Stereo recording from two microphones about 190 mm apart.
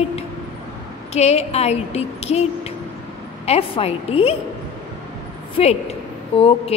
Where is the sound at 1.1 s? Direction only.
35° left (ahead or behind).